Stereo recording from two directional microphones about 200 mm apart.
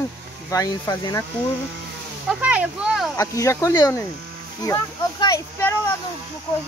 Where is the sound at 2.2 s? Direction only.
5° right (ahead or behind).